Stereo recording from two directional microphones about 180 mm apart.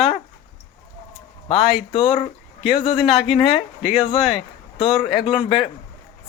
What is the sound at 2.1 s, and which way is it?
Speech, 35° left (ahead or behind).